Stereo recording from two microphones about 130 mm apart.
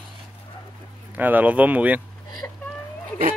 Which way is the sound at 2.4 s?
15° left (ahead or behind).